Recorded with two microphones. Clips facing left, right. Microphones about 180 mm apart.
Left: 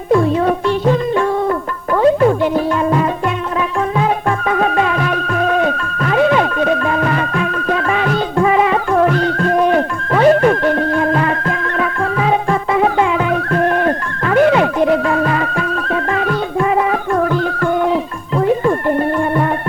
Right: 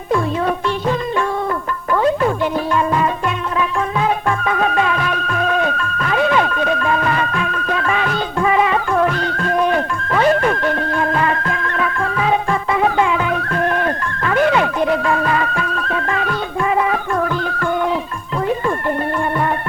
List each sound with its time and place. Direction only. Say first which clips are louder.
0.1 s music: left 5 dB; 35° left (ahead or behind)